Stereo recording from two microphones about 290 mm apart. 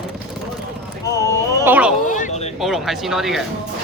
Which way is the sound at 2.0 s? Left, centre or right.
Left.